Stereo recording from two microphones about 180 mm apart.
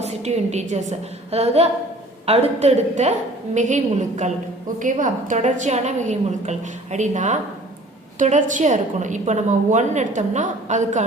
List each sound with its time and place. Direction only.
0.0 s a woman's voice: 40° right (ahead or behind)